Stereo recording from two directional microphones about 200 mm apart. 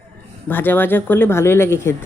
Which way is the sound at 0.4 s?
10° left (ahead or behind).